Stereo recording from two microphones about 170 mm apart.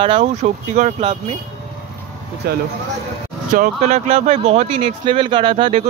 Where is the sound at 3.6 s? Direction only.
40° right (ahead or behind).